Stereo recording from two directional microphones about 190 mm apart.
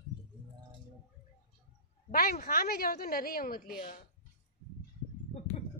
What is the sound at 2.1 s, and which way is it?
A woman's voice, 50° left (ahead or behind).